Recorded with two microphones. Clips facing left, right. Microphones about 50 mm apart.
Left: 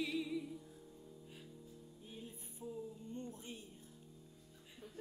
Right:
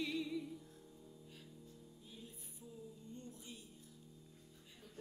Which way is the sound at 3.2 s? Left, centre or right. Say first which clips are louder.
Left 7 dB; left.